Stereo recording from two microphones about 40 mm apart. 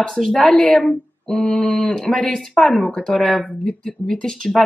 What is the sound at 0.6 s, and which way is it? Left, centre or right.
A woman's voice, left.